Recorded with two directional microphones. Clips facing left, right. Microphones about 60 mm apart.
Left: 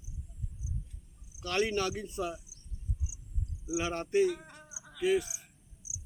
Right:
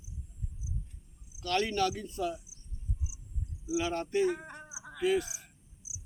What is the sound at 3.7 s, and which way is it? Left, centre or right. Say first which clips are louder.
Speech: left 1 dB; left.